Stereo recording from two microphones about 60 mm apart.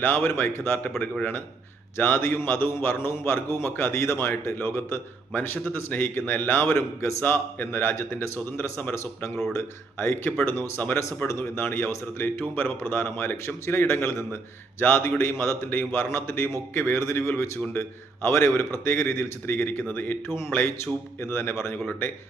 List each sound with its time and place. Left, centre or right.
0.0 s a man's voice: left
3.1 s speech: left
5.3 s a man's voice: left
9.0 s a man's voice: left
19.9 s a man's voice: left
20.2 s speech: left
21.8 s a man's voice: left